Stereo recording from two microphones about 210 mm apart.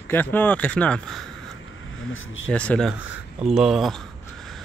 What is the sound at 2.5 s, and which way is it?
Speech, 5° left (ahead or behind).